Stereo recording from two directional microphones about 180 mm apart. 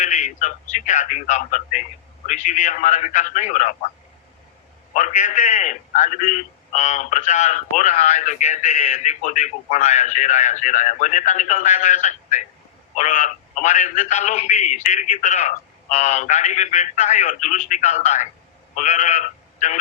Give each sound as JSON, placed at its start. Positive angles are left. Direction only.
{"t": 0.0, "sound": "a man's voice", "side_deg": 40}
{"t": 4.9, "sound": "a man's voice", "side_deg": 45}